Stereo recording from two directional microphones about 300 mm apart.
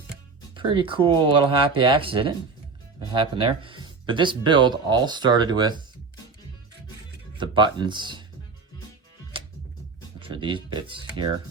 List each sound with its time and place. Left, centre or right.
0.5 s speech: centre
7.3 s speech: centre
10.2 s speech: centre